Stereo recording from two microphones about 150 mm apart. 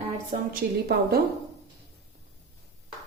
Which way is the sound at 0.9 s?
90° right.